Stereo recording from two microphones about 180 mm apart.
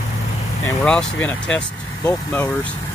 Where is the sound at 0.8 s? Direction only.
5° left (ahead or behind).